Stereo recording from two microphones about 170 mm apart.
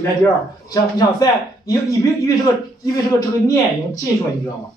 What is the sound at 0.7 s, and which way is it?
Speech, 20° left (ahead or behind).